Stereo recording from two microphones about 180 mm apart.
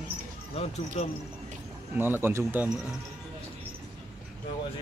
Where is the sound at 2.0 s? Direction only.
10° right (ahead or behind).